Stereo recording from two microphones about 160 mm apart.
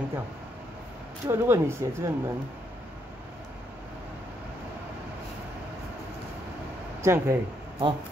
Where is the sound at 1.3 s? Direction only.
15° right (ahead or behind).